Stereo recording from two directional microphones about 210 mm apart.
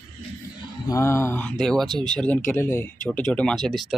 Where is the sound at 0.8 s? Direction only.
15° left (ahead or behind).